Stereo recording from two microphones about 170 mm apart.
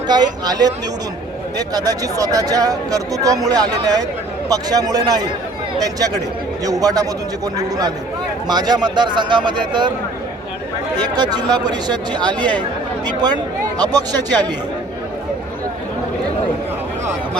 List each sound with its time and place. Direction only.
0.1 s speech: 25° right (ahead or behind)
6.7 s speech: 20° right (ahead or behind)
11.1 s speech: 25° right (ahead or behind)